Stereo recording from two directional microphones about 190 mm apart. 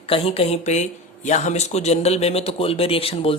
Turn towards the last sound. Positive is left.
turn(degrees=30)  # may be behind; listen again after turning